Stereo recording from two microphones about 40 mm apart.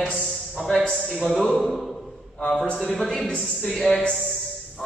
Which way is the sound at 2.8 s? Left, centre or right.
Centre.